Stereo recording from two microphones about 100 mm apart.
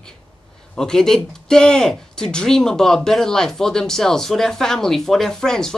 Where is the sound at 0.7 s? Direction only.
5° left (ahead or behind).